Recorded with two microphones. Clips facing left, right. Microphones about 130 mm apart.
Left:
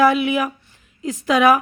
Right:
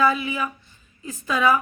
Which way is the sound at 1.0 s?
90° left.